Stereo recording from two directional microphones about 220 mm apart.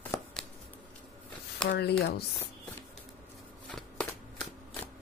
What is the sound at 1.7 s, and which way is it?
Speech, 50° left (ahead or behind).